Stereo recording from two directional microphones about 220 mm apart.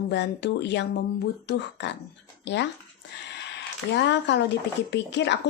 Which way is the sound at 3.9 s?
55° left (ahead or behind).